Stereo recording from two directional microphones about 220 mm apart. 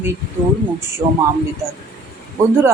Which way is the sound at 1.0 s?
15° right (ahead or behind).